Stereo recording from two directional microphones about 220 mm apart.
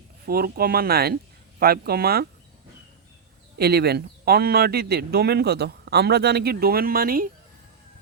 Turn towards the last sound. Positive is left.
turn(degrees=-40)  # may be behind; listen again after turning